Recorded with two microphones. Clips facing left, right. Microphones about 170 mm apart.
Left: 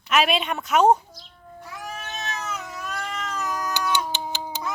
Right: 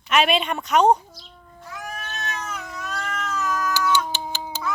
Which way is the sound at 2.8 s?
10° left (ahead or behind).